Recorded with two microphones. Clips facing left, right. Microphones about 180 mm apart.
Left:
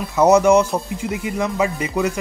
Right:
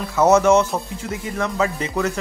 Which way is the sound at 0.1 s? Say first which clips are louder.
Left 1 dB; 15° left (ahead or behind).